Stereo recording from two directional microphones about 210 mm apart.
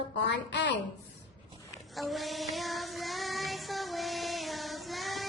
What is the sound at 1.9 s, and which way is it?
Child singing, centre (ahead or behind).